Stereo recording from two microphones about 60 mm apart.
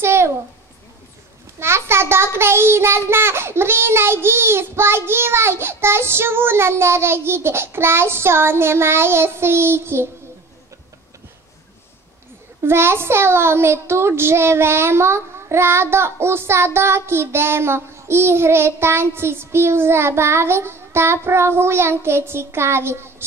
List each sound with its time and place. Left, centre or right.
0.0 s a sound: right
1.6 s a child's voice: right
12.6 s a child's voice: right